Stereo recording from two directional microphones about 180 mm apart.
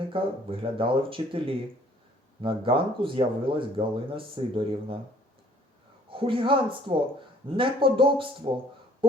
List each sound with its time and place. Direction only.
0.1 s speech: 30° right (ahead or behind)
6.1 s speech: 30° right (ahead or behind)